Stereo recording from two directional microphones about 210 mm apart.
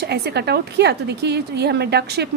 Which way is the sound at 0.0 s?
50° right (ahead or behind).